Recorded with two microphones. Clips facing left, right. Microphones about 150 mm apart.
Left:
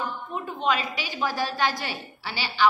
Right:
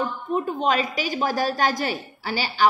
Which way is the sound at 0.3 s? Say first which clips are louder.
Right 4 dB; 40° right (ahead or behind).